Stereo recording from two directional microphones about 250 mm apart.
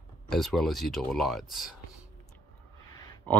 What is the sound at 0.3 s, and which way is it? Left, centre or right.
Speech, centre.